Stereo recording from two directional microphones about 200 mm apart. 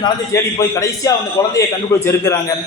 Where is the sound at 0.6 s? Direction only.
15° left (ahead or behind).